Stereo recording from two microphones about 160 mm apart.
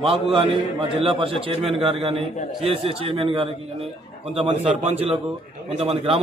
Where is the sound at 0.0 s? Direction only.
35° right (ahead or behind).